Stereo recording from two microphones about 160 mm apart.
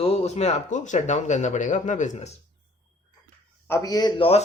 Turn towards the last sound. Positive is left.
turn(degrees=25)  # may be behind; listen again after turning